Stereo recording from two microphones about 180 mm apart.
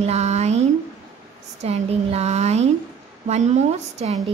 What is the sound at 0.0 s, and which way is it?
A woman's voice, 40° right (ahead or behind).